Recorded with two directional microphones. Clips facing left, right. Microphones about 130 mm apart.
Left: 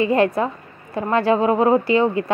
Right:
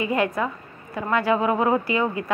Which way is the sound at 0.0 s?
30° left (ahead or behind).